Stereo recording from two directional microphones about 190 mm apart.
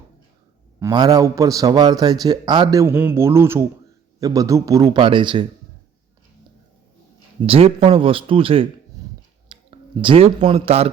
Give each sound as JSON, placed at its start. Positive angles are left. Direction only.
{"t": 0.8, "sound": "a man's voice", "side_deg": -20}
{"t": 7.4, "sound": "a man's voice", "side_deg": -30}